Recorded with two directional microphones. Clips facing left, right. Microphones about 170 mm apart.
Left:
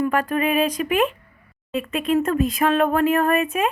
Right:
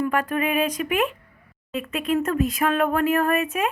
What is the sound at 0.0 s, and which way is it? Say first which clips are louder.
Speech: left 2 dB; 35° left (ahead or behind).